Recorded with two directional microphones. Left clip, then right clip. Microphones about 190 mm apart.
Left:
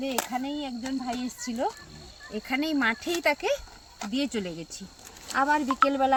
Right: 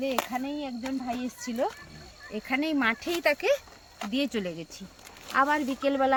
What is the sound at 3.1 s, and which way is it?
Speech, centre (ahead or behind).